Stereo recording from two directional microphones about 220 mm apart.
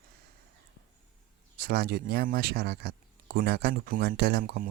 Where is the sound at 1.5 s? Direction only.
45° right (ahead or behind).